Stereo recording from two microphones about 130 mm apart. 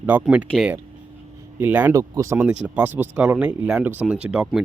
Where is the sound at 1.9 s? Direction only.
25° right (ahead or behind).